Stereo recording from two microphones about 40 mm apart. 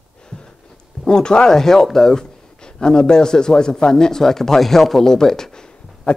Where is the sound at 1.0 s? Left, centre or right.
Centre.